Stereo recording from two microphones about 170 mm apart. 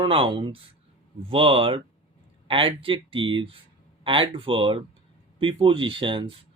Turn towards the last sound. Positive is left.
turn(degrees=-30)  # may be behind; listen again after turning